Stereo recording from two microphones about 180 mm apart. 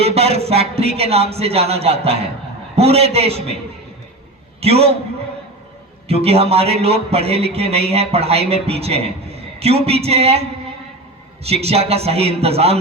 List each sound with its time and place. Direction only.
0.0 s a man's voice: 35° right (ahead or behind)
4.6 s a man's voice: 35° right (ahead or behind)
6.1 s a man's voice: 35° right (ahead or behind)
11.4 s a man's voice: 35° right (ahead or behind)